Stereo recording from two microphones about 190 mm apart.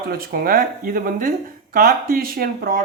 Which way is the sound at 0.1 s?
50° right (ahead or behind).